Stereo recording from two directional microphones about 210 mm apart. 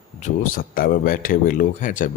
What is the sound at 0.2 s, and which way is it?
A man's voice, 40° left (ahead or behind).